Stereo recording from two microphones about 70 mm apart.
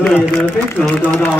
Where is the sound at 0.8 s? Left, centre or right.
Left.